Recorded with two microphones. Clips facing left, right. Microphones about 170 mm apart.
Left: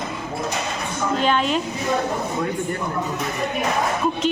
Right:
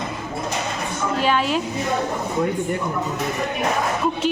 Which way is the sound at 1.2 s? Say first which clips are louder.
Even; 5° right (ahead or behind).